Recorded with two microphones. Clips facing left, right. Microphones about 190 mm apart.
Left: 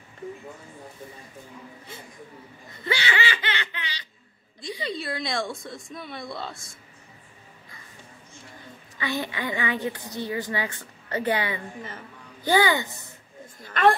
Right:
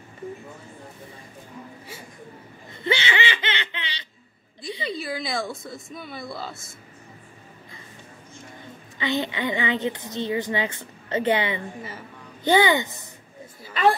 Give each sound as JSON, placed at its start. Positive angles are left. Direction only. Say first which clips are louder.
{"t": 2.7, "sound": "laughter", "louder": "right 3 dB", "side_deg": -25}
{"t": 4.8, "sound": "speech", "louder": "right 1 dB", "side_deg": 0}
{"t": 8.9, "sound": "a woman's voice", "louder": "right 4 dB", "side_deg": -20}
{"t": 13.6, "sound": "a woman's voice", "louder": "even", "side_deg": -5}